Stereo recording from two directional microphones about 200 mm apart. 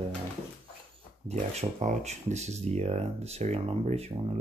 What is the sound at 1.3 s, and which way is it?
Speech, 35° right (ahead or behind).